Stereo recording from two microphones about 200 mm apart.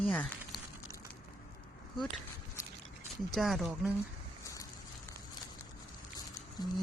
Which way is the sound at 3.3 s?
Centre (ahead or behind).